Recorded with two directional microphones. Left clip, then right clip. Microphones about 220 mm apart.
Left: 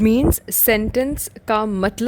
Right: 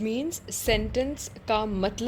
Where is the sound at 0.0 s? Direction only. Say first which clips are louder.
Left 13 dB; 40° left (ahead or behind).